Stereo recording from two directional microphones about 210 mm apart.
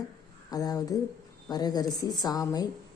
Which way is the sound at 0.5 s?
20° left (ahead or behind).